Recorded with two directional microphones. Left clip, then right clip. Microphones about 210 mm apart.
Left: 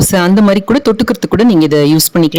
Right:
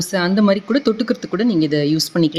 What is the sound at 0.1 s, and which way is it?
A woman's voice, 50° left (ahead or behind).